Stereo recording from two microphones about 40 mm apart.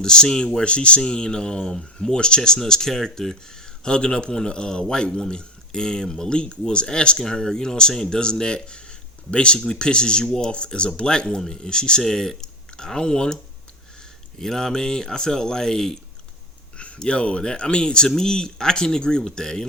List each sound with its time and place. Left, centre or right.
0.0 s a man's voice: centre
3.8 s a man's voice: left
12.0 s speech: centre
16.7 s a sound: left
17.1 s a man's voice: left